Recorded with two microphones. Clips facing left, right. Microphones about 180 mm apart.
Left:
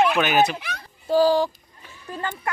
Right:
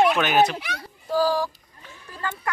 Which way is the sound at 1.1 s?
25° left (ahead or behind).